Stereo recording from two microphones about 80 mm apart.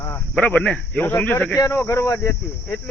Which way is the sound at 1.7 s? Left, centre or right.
Left.